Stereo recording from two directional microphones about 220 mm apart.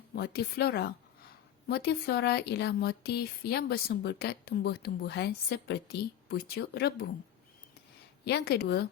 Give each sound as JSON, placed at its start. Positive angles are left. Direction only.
{"t": 0.2, "sound": "speech", "side_deg": 45}
{"t": 8.2, "sound": "speech", "side_deg": 50}